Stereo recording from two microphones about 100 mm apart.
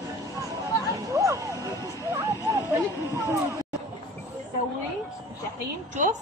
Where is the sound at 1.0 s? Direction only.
35° right (ahead or behind).